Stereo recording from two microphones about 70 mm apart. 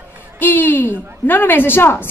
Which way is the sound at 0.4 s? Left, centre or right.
Left.